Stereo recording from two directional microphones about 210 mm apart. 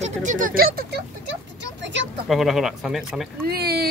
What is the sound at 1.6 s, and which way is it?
Vehicle, 60° right (ahead or behind).